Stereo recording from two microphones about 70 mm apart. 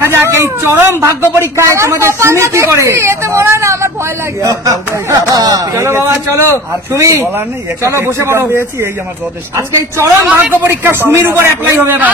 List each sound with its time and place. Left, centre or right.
0.0 s a woman's voice: right
4.4 s a woman's voice: right